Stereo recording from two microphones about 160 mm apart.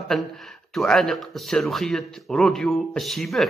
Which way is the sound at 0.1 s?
Centre (ahead or behind).